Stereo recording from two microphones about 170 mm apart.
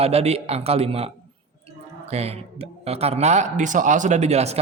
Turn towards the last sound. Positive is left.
turn(degrees=-40)  # may be behind; listen again after turning